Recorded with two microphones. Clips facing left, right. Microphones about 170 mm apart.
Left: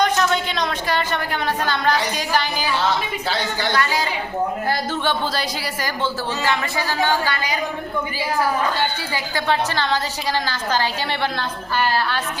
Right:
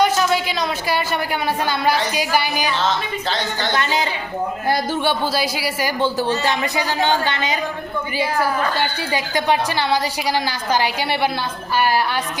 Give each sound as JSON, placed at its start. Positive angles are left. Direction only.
{"t": 0.0, "sound": "a woman's voice", "side_deg": -5}
{"t": 2.7, "sound": "a man's voice", "side_deg": 10}
{"t": 3.7, "sound": "speech", "side_deg": -20}
{"t": 4.7, "sound": "a woman's voice", "side_deg": -10}
{"t": 9.1, "sound": "a woman's voice", "side_deg": -15}